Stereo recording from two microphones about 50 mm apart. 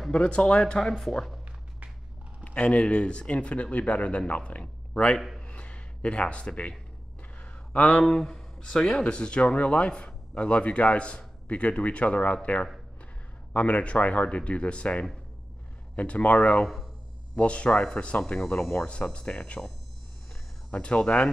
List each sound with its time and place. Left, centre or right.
0.1 s speech: centre
0.7 s speech: centre
2.4 s a man's voice: left
5.4 s a sound: left
7.7 s speech: left
8.0 s speech: centre
16.6 s a sound: centre
17.4 s speech: left
18.2 s speech: centre
19.1 s speech: left
20.7 s speech: centre